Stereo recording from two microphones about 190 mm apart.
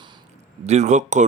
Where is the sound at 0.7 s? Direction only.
35° right (ahead or behind).